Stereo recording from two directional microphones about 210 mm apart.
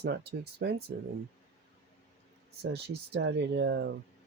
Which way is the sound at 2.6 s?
55° right (ahead or behind).